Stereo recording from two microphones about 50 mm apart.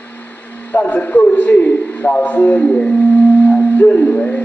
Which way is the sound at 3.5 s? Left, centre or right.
Left.